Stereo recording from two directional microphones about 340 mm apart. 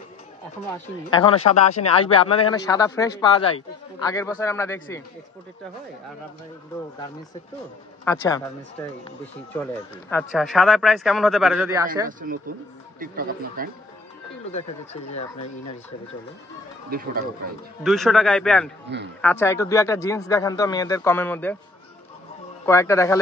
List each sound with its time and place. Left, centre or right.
1.1 s a man's voice: centre
8.0 s a man's voice: centre
9.5 s speech: centre
12.1 s speech: right
14.5 s speech: centre
16.9 s speech: right
17.8 s speech: centre
18.9 s speech: right
19.2 s a man's voice: centre
22.7 s a man's voice: centre